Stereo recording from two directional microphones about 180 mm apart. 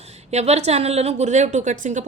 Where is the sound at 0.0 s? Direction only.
35° right (ahead or behind).